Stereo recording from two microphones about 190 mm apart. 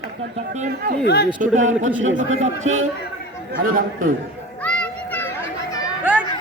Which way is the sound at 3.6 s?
45° right (ahead or behind).